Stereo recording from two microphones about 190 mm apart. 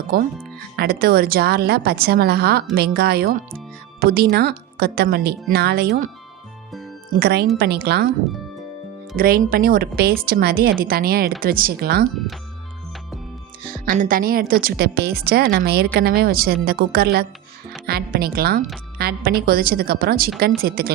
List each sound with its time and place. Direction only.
0.1 s a woman's voice: 55° right (ahead or behind)
7.2 s a woman's voice: 55° right (ahead or behind)
9.1 s a woman's voice: 50° right (ahead or behind)
13.8 s a woman's voice: 45° right (ahead or behind)